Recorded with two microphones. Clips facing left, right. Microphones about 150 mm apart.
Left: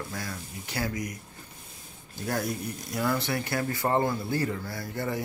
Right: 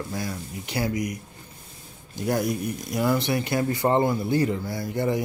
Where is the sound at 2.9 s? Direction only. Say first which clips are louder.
Right 5 dB; 15° right (ahead or behind).